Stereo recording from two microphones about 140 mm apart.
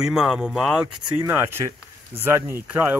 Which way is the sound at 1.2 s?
15° right (ahead or behind).